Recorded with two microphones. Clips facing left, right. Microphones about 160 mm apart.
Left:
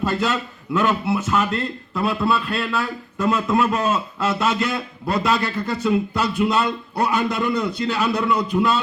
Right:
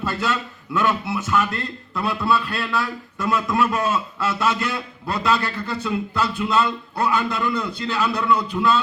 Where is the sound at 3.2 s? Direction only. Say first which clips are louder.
Left 2 dB; 35° left (ahead or behind).